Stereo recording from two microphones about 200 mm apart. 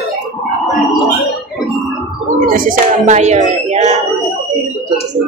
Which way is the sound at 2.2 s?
45° right (ahead or behind).